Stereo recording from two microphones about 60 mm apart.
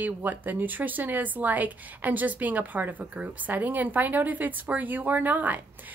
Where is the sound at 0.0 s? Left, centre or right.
Right.